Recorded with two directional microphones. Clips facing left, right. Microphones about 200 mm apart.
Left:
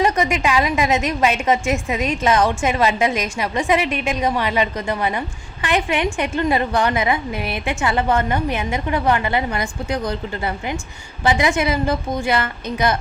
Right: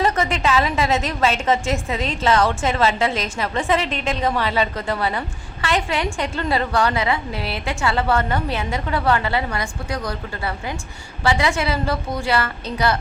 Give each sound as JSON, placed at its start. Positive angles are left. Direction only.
{"t": 0.0, "sound": "a woman's voice", "side_deg": 15}